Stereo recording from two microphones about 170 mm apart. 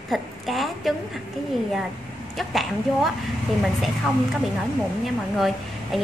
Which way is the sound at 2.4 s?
Centre (ahead or behind).